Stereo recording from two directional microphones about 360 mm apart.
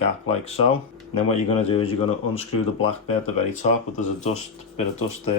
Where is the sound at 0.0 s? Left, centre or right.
Centre.